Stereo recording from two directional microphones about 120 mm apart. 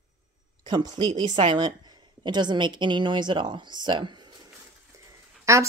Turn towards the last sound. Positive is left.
turn(degrees=-25)  # may be behind; listen again after turning